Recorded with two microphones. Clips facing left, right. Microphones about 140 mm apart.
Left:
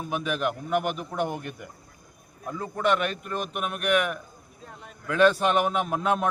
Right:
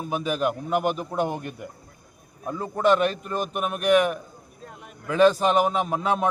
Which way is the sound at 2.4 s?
30° right (ahead or behind).